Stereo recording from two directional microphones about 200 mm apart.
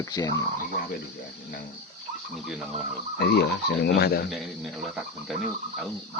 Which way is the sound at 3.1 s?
55° left (ahead or behind).